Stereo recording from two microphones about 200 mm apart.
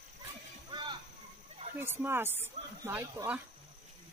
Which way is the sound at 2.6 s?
35° right (ahead or behind).